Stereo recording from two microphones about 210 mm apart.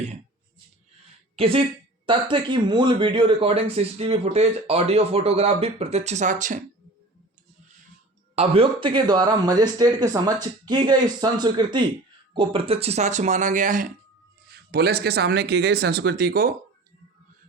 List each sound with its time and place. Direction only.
1.4 s a woman's voice: 25° right (ahead or behind)
8.4 s speech: 25° right (ahead or behind); by 16.6 s 45° right (ahead or behind)